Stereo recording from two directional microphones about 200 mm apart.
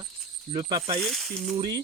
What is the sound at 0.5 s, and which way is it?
Cricket, 25° right (ahead or behind).